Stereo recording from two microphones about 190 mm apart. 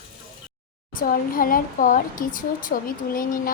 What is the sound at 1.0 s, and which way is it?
Speech, 50° left (ahead or behind).